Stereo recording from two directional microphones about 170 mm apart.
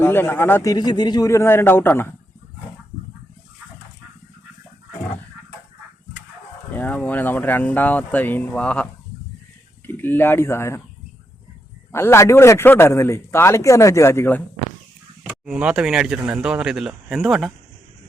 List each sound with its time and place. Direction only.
0.0 s a man's voice: 15° left (ahead or behind)
6.7 s a man's voice: 10° left (ahead or behind)
11.9 s a man's voice: 15° left (ahead or behind)
15.2 s speech: 5° right (ahead or behind)